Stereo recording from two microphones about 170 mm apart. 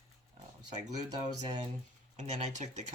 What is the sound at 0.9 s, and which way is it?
Speech, 25° right (ahead or behind).